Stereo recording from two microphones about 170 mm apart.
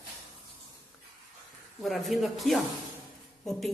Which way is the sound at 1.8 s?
Centre (ahead or behind).